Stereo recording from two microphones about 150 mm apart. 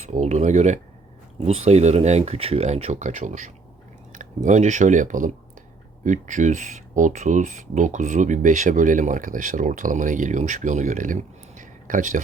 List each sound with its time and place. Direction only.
0.0 s speech: 50° right (ahead or behind)